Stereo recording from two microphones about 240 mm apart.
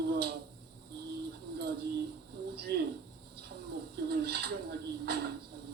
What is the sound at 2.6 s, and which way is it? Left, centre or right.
Speech, right.